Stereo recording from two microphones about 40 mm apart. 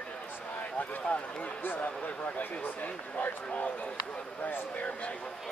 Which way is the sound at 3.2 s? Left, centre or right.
Left.